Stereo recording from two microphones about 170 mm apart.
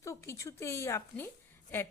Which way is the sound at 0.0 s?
15° left (ahead or behind).